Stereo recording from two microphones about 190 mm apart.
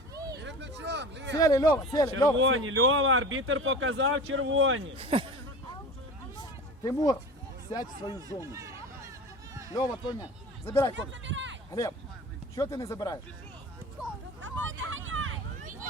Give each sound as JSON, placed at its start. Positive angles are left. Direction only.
{"t": 0.3, "sound": "a sound", "side_deg": -65}
{"t": 1.4, "sound": "speech", "side_deg": 20}
{"t": 2.4, "sound": "speech", "side_deg": -90}
{"t": 4.9, "sound": "speech", "side_deg": -30}
{"t": 6.4, "sound": "a sound", "side_deg": 20}
{"t": 7.7, "sound": "speech", "side_deg": 20}
{"t": 8.3, "sound": "speech", "side_deg": -15}
{"t": 9.7, "sound": "speech", "side_deg": 20}
{"t": 10.9, "sound": "speech", "side_deg": -75}
{"t": 11.7, "sound": "speech", "side_deg": 20}
{"t": 14.4, "sound": "hubbub", "side_deg": -90}